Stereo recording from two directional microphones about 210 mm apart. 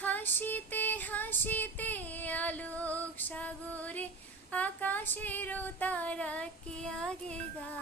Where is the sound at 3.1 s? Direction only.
10° left (ahead or behind).